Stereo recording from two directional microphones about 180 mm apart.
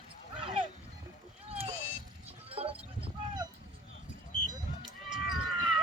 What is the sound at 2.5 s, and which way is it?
Sheep, 30° right (ahead or behind).